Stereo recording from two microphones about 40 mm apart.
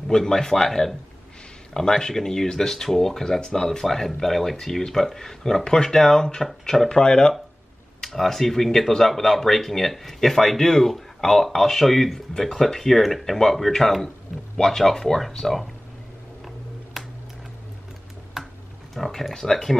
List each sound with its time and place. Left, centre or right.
0.1 s speech: centre
3.6 s speech: centre
8.0 s speech: centre
17.0 s tick-tock: centre
18.4 s a sound: centre
18.9 s speech: centre